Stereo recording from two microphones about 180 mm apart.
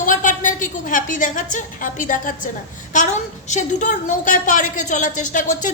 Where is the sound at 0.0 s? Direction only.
45° left (ahead or behind).